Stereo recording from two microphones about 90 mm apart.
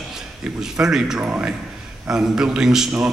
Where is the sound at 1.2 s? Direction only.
15° right (ahead or behind).